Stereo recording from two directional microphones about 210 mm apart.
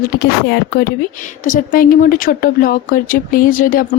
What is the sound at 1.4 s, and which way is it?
Speech, 40° left (ahead or behind).